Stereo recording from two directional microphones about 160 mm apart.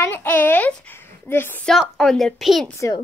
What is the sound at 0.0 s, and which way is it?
A woman's voice, 10° left (ahead or behind).